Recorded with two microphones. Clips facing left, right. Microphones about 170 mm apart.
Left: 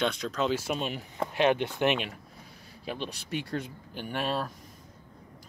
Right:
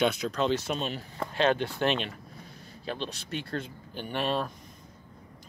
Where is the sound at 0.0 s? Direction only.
5° right (ahead or behind).